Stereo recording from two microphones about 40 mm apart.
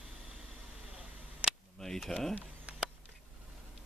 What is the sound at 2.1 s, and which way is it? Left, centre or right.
Speech, centre.